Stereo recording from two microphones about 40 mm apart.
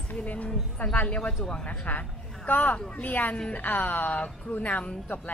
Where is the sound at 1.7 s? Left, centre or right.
Left.